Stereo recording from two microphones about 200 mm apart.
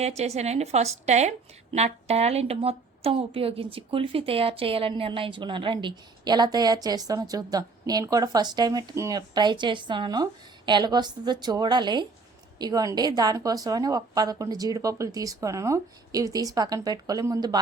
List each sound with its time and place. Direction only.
0.0 s a woman's voice: 30° right (ahead or behind)